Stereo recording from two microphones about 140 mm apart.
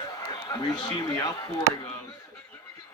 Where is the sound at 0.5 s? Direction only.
25° left (ahead or behind).